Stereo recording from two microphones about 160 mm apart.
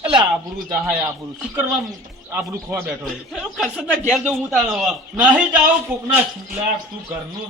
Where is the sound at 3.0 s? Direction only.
Centre (ahead or behind).